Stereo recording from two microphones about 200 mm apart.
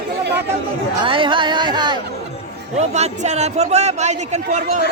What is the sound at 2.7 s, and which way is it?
A man's voice, 35° right (ahead or behind).